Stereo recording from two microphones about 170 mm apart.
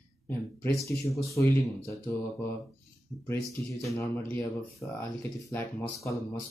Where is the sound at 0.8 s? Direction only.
15° left (ahead or behind).